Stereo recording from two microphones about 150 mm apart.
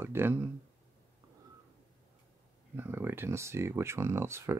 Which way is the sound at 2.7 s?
15° right (ahead or behind).